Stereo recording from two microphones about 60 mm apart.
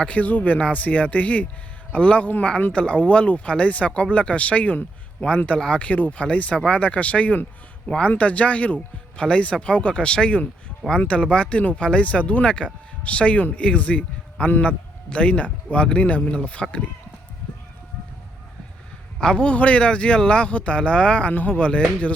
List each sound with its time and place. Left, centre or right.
0.0 s a man's voice: left
19.2 s speech: centre